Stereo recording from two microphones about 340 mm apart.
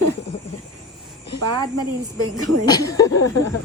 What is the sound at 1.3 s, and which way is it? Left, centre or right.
Speech, centre.